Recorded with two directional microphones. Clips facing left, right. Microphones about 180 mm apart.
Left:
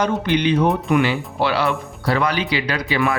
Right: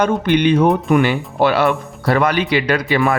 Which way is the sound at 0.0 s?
55° right (ahead or behind).